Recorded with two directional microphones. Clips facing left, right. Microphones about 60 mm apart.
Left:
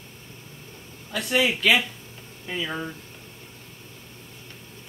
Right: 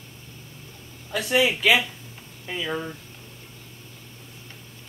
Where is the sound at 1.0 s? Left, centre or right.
Centre.